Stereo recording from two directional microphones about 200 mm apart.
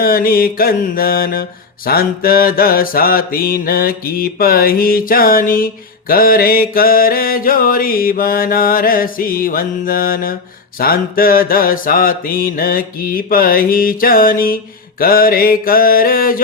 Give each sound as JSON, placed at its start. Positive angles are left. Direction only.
{"t": 0.0, "sound": "mantra", "side_deg": 45}